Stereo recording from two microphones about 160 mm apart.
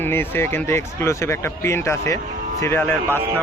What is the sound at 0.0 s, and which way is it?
A man's voice, 15° left (ahead or behind).